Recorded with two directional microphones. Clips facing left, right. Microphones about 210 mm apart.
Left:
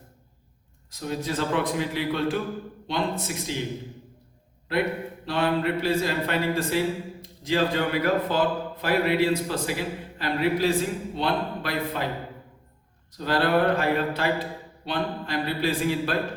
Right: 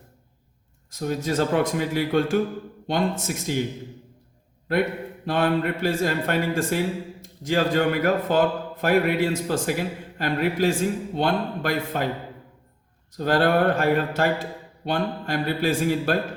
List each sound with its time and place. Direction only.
0.9 s speech: 50° right (ahead or behind)
5.2 s speech: 50° right (ahead or behind)
13.1 s speech: 50° right (ahead or behind)